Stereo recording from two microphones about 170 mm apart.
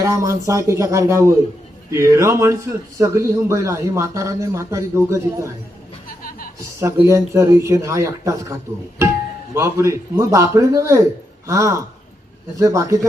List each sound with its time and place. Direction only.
0.0 s a man's voice: 20° right (ahead or behind)
6.7 s a man's voice: 15° right (ahead or behind)
9.6 s a man's voice: 15° right (ahead or behind)